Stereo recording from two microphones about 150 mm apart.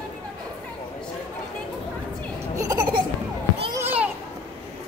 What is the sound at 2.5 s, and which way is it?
Laughter, 25° right (ahead or behind).